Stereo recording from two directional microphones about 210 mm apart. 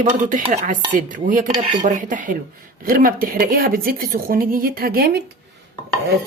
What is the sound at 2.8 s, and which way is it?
A woman's voice, 45° right (ahead or behind).